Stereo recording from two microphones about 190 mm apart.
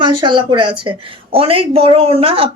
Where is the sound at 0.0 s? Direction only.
25° right (ahead or behind).